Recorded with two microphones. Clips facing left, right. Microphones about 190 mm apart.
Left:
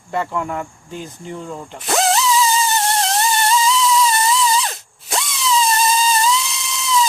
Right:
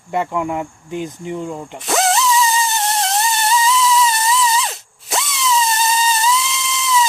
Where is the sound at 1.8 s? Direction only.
Centre (ahead or behind).